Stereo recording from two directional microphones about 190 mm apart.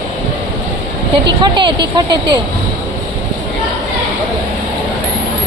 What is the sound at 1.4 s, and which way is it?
A woman's voice, 25° right (ahead or behind).